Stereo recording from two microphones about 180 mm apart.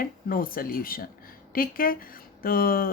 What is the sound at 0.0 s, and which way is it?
Speech, 50° left (ahead or behind).